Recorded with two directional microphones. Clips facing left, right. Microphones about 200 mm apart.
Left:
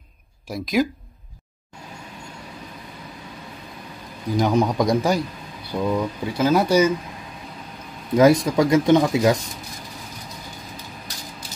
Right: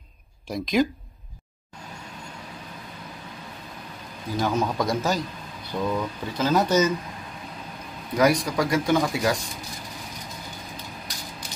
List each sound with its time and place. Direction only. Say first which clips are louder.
0.5 s speech: left 1 dB; 5° left (ahead or behind)
4.4 s speech: left 5 dB; 15° left (ahead or behind)
8.2 s speech: left 6 dB; 25° left (ahead or behind)